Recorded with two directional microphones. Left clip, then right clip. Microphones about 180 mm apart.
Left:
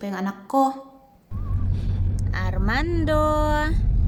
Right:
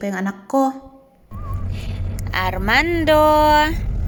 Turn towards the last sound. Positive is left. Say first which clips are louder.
# right 10 dB
turn(degrees=-10)  # may be behind; listen again after turning